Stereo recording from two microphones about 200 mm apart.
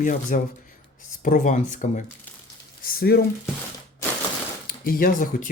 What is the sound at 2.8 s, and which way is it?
Speech, 50° left (ahead or behind).